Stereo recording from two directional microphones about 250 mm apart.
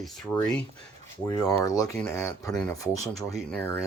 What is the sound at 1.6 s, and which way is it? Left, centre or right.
Speech, centre.